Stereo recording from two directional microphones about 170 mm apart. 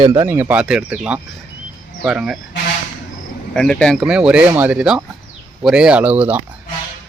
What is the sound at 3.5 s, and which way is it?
Speech, 5° left (ahead or behind).